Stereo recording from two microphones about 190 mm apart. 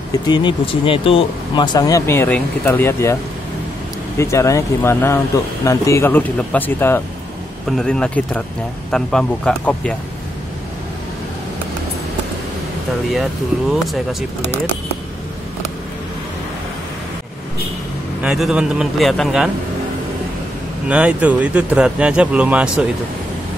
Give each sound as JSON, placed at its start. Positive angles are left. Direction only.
{"t": 0.3, "sound": "speech", "side_deg": 25}
{"t": 4.2, "sound": "a man's voice", "side_deg": 15}
{"t": 13.1, "sound": "a man's voice", "side_deg": 0}
{"t": 18.2, "sound": "a man's voice", "side_deg": -5}
{"t": 20.9, "sound": "speech", "side_deg": -5}